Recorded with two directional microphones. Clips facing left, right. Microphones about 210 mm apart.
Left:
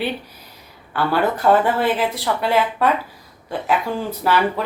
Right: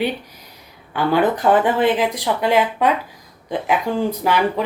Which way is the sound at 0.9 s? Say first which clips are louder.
Right 2 dB; 15° right (ahead or behind).